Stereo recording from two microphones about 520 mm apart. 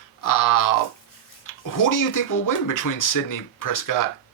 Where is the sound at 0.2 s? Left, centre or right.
Left.